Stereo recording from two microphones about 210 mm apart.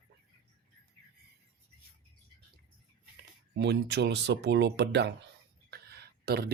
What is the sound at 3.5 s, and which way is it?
Speech, 55° right (ahead or behind).